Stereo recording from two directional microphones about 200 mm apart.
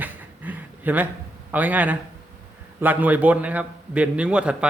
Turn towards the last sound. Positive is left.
turn(degrees=-5)  # may be behind; listen again after turning